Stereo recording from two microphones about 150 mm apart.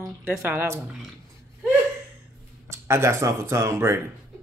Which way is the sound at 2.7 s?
20° right (ahead or behind).